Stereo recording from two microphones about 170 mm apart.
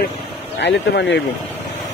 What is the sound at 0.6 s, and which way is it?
Speech, 90° left.